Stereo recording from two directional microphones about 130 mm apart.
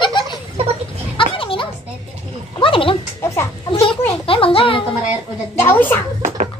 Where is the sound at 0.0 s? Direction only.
35° left (ahead or behind).